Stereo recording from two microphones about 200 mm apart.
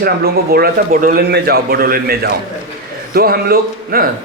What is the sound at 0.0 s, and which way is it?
A man's voice, 50° right (ahead or behind).